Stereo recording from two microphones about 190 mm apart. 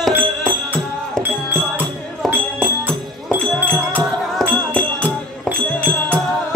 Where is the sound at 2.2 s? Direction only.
Centre (ahead or behind).